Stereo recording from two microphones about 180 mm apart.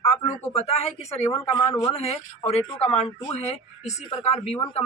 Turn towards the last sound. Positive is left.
turn(degrees=25)  # may be behind; listen again after turning